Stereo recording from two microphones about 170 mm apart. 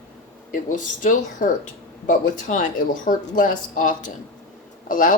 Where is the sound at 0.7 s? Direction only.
50° left (ahead or behind).